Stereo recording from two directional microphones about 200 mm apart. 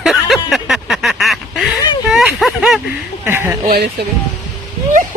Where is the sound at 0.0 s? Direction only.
Centre (ahead or behind).